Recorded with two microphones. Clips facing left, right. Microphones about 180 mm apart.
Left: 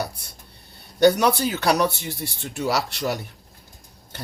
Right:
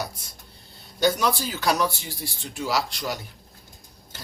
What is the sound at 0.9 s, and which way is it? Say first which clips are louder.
Speech: left 6 dB; 65° left (ahead or behind).